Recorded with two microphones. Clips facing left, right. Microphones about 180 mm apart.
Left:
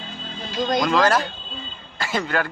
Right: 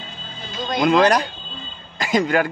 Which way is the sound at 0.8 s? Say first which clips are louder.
Right 7 dB; 20° right (ahead or behind).